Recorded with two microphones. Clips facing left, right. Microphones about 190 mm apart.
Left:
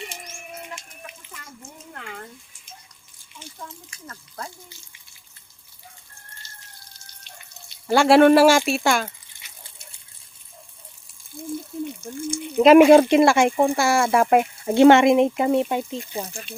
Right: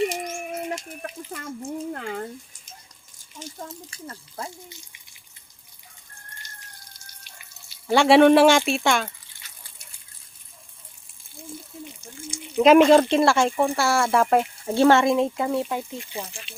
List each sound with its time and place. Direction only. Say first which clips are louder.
0.1 s a sound: right 9 dB; 45° right (ahead or behind)
3.3 s speech: right 3 dB; 40° right (ahead or behind); by 4.9 s 25° right (ahead or behind)
6.4 s a sound: right 1 dB; 15° right (ahead or behind)
7.7 s speech: left 1 dB; centre (ahead or behind)
12.5 s speech: left 3 dB; 5° left (ahead or behind); by 16.0 s 20° left (ahead or behind)
16.0 s speech: left 4 dB; 40° left (ahead or behind)